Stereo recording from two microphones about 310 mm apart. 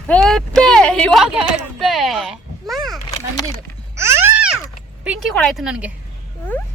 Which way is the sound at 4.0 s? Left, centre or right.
Centre.